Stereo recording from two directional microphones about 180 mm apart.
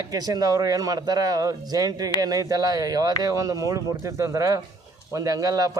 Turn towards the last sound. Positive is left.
turn(degrees=-20)  # may be behind; listen again after turning